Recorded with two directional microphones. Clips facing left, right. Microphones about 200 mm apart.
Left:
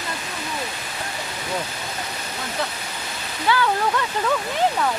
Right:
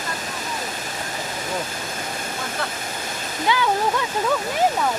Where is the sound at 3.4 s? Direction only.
15° right (ahead or behind).